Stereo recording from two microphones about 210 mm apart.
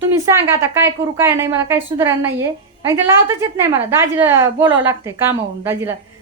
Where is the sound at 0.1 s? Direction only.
10° right (ahead or behind).